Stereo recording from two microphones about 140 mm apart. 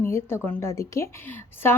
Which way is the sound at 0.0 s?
15° left (ahead or behind).